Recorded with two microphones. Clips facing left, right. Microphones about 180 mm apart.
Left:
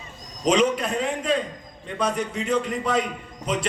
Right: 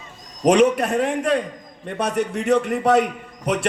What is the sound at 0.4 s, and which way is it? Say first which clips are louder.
A man's voice: right 5 dB; 65° right (ahead or behind).